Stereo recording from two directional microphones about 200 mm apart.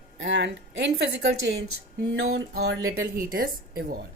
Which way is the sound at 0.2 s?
65° right (ahead or behind).